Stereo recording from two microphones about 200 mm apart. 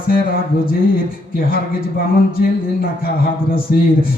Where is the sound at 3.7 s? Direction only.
45° left (ahead or behind).